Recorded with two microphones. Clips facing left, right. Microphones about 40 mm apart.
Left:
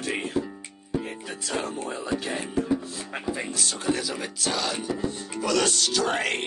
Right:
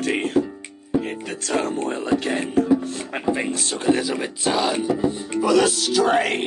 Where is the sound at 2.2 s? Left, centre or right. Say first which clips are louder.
Right 7 dB; right.